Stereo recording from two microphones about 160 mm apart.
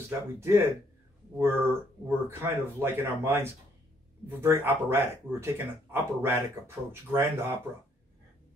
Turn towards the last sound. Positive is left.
turn(degrees=-15)  # may be behind; listen again after turning